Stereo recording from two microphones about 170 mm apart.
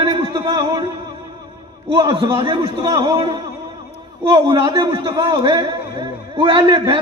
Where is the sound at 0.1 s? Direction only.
25° right (ahead or behind).